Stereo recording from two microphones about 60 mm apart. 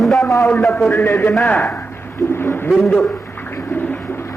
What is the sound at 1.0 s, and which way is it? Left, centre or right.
Speech, left.